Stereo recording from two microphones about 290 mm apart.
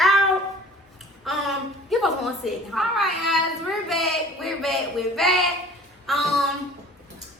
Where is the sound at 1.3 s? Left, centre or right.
Centre.